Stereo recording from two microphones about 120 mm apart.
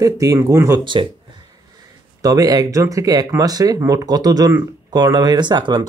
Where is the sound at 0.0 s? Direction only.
30° right (ahead or behind).